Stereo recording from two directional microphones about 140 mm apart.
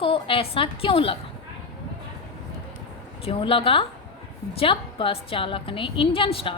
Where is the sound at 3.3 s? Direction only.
40° left (ahead or behind).